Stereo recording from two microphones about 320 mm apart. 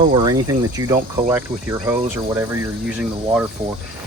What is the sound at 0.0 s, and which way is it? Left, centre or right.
Speech, centre.